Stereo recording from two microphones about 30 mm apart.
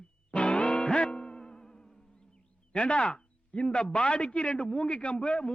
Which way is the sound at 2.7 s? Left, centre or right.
Left.